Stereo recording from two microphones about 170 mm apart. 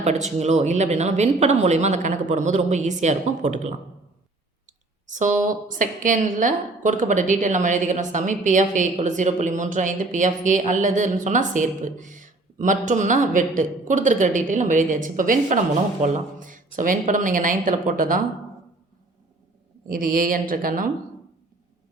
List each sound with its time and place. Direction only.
0.3 s a woman's voice: 40° right (ahead or behind)
5.0 s a woman's voice: 50° right (ahead or behind)
19.9 s speech: 55° right (ahead or behind)